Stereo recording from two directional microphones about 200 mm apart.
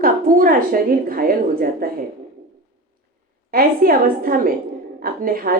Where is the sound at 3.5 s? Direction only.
45° right (ahead or behind).